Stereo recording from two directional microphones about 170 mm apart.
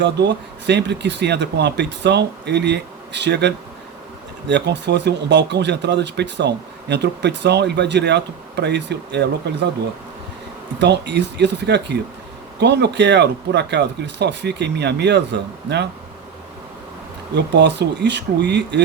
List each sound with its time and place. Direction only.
0.0 s speech: 90° right
10.8 s speech: 90° right
17.3 s speech: 90° right